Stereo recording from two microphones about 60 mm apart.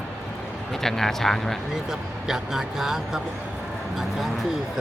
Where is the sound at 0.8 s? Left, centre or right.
Centre.